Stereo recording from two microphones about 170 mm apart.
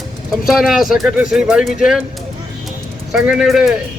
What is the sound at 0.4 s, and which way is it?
Speech, centre (ahead or behind).